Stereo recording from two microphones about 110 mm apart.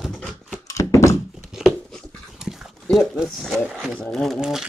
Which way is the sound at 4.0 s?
5° left (ahead or behind).